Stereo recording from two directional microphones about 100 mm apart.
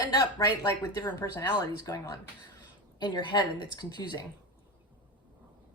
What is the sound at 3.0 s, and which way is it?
A woman's voice, 50° left (ahead or behind).